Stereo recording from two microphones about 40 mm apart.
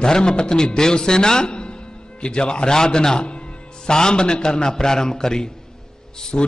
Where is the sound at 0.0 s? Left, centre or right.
Left.